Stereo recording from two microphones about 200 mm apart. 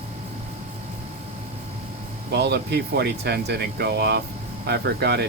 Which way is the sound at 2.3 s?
55° right (ahead or behind).